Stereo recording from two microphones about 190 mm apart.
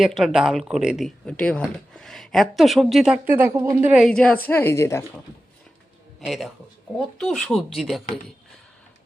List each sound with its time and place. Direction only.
0.0 s speech: centre (ahead or behind)
3.8 s a woman's voice: centre (ahead or behind)
6.1 s a man's voice: centre (ahead or behind)